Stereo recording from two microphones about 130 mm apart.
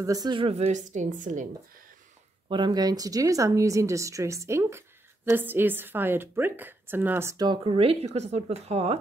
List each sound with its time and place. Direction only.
0.0 s a woman's voice: 30° right (ahead or behind); by 1.5 s 80° right
2.5 s speech: 35° right (ahead or behind); by 7.4 s 20° right (ahead or behind)
7.4 s speech: 40° right (ahead or behind)